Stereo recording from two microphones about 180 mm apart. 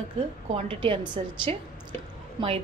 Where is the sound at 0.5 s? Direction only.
30° right (ahead or behind).